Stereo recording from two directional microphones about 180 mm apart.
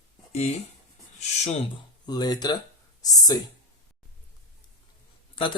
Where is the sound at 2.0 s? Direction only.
20° left (ahead or behind).